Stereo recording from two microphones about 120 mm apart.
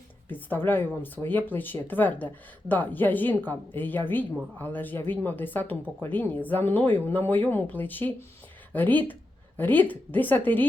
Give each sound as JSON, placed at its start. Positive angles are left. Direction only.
{"t": 0.3, "sound": "speech", "side_deg": 15}